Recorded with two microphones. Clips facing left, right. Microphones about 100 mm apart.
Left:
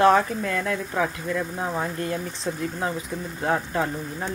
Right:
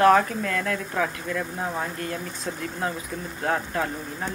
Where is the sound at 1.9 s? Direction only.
25° left (ahead or behind).